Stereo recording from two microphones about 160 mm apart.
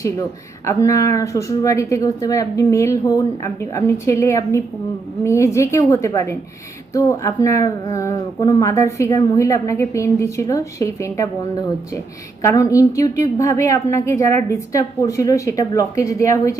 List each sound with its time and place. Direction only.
0.0 s a woman's voice: 20° left (ahead or behind)
12.4 s a woman's voice: 20° left (ahead or behind)